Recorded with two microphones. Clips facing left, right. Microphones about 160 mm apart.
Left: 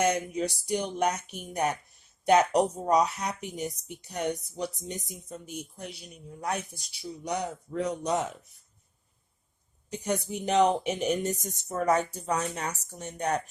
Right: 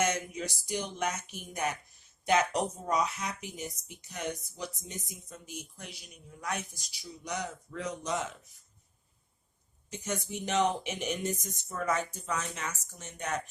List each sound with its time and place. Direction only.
0.0 s speech: 35° left (ahead or behind)
10.0 s speech: 35° left (ahead or behind)